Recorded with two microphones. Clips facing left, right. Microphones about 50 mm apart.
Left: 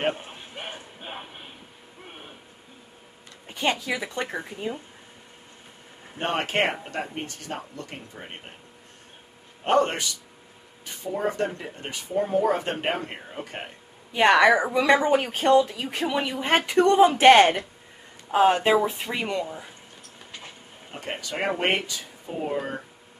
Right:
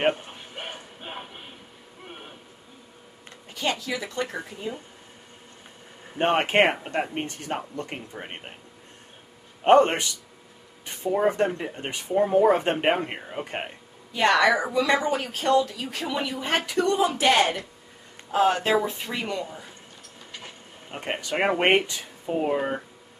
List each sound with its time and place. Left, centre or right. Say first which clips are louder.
3.7 s speech: left 1 dB; centre
6.1 s speech: right 5 dB; right
9.7 s speech: right 5 dB; right
11.1 s speech: right 4 dB; right
14.1 s a woman's voice: left 3 dB; left
18.3 s speech: left 2 dB; centre
20.9 s speech: right 4 dB; right